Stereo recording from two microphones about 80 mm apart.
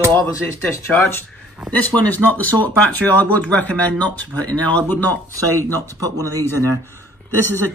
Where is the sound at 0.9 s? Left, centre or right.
Left.